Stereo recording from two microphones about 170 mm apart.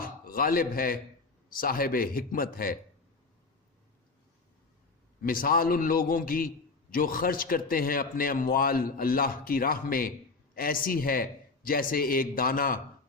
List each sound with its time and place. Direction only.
0.0 s a sound: 60° left (ahead or behind)
1.5 s a man's voice: 60° left (ahead or behind)
5.2 s a man's voice: 55° left (ahead or behind)